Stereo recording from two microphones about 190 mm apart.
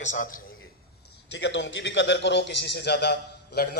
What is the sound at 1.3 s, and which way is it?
A man's voice, 70° left (ahead or behind).